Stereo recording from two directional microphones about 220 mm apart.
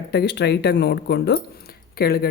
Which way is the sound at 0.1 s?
50° left (ahead or behind).